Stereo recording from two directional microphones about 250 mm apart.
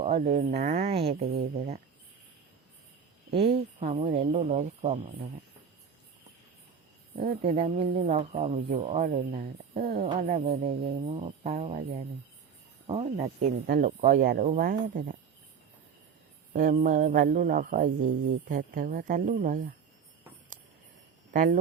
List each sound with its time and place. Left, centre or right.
0.0 s speech: right
0.8 s speech: right
1.2 s speech: right
3.8 s speech: right
7.4 s speech: right
16.5 s speech: right
21.3 s speech: right